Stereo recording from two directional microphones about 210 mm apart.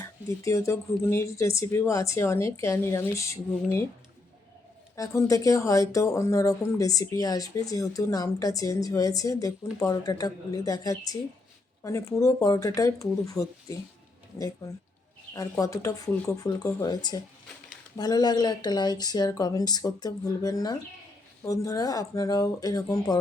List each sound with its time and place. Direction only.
0.4 s speech: 15° left (ahead or behind)
4.9 s speech: 15° left (ahead or behind)
15.3 s speech: 15° left (ahead or behind)